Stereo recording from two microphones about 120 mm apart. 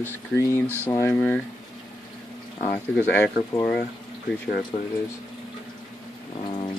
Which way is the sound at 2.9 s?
10° left (ahead or behind).